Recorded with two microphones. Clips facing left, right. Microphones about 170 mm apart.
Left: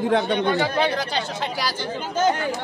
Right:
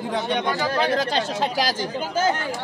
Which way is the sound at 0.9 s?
50° right (ahead or behind).